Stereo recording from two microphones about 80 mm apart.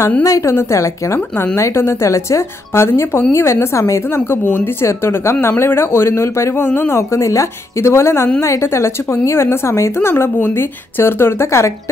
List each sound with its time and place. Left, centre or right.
0.2 s a woman's voice: left
1.3 s a woman's voice: left
7.0 s a woman's voice: left